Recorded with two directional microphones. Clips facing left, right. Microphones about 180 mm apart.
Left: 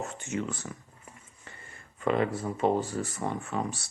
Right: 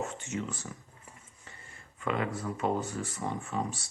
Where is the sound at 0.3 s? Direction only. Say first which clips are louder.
Left 3 dB; 60° left (ahead or behind).